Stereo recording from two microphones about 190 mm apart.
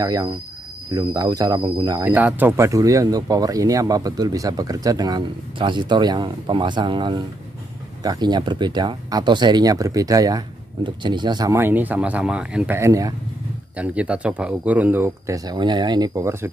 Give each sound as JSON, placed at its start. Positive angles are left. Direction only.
{"t": 0.0, "sound": "speech", "side_deg": -20}
{"t": 2.1, "sound": "speech", "side_deg": -10}